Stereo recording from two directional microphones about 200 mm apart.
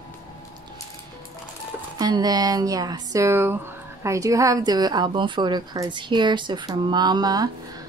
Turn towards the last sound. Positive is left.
turn(degrees=-20)  # may be behind; listen again after turning